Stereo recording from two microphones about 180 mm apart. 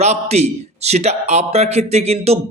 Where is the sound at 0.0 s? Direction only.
35° right (ahead or behind).